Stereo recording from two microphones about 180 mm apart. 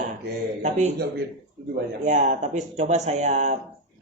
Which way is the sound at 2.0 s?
45° right (ahead or behind).